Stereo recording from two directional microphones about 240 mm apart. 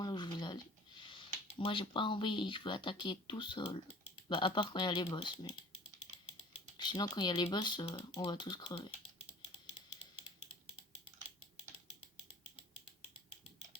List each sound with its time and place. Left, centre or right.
0.0 s a sound: centre
1.5 s speech: left
6.7 s speech: centre